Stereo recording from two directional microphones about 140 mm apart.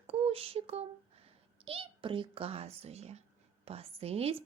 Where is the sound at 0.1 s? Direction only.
45° right (ahead or behind).